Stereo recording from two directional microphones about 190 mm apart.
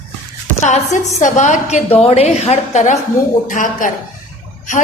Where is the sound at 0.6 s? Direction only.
40° left (ahead or behind).